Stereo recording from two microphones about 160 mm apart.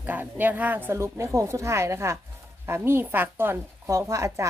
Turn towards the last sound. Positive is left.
turn(degrees=-20)  # may be behind; listen again after turning